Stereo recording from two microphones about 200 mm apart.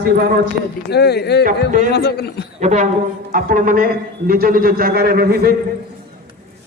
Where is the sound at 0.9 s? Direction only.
55° left (ahead or behind).